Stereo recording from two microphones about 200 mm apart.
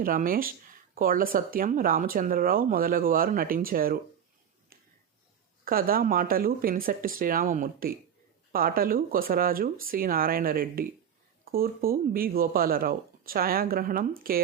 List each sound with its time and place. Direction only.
0.0 s speech: 45° right (ahead or behind)
5.6 s speech: 45° right (ahead or behind)